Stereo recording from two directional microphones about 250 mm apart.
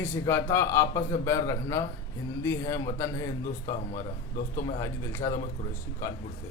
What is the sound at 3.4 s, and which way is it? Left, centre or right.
Speech, left.